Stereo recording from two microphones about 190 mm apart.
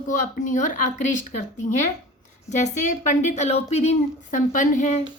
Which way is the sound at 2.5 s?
40° left (ahead or behind).